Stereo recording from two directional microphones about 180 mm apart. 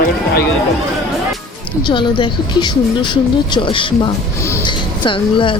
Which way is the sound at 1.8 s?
25° left (ahead or behind).